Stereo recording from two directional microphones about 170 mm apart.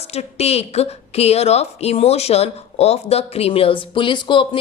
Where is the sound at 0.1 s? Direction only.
35° left (ahead or behind).